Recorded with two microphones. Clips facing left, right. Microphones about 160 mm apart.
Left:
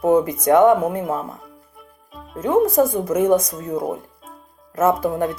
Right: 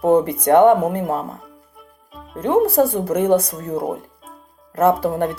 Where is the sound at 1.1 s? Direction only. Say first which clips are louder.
Right 1 dB; 35° right (ahead or behind).